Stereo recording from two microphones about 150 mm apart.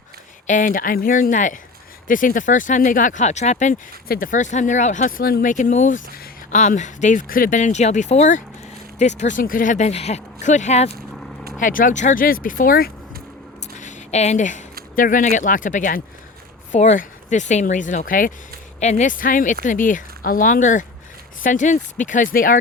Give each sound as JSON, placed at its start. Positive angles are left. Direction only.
{"t": 0.4, "sound": "speech", "side_deg": 60}
{"t": 4.1, "sound": "speech", "side_deg": 65}
{"t": 11.6, "sound": "speech", "side_deg": 65}
{"t": 13.7, "sound": "a sound", "side_deg": 50}
{"t": 14.9, "sound": "speech", "side_deg": 65}
{"t": 18.8, "sound": "speech", "side_deg": 50}